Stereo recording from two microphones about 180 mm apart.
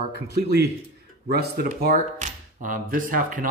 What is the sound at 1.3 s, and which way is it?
Speech, 55° right (ahead or behind).